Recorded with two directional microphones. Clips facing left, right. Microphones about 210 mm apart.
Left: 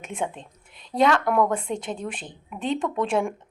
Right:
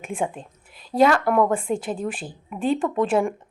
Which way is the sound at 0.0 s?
10° right (ahead or behind).